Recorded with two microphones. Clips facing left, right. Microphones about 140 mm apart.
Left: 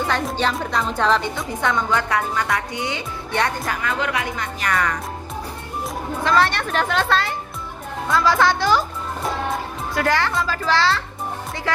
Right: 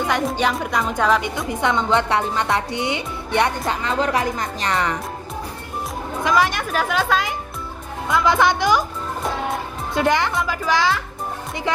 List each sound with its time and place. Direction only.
0.5 s a woman's voice: 10° right (ahead or behind); by 4.7 s 35° right (ahead or behind)
4.7 s a woman's voice: 25° right (ahead or behind)
6.2 s a woman's voice: 10° right (ahead or behind)
9.9 s speech: 20° right (ahead or behind)